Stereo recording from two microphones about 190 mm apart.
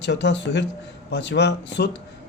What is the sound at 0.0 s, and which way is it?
Speech, 65° left (ahead or behind).